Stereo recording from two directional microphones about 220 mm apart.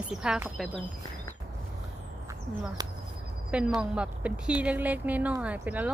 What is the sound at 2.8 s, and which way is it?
Insect, 15° right (ahead or behind).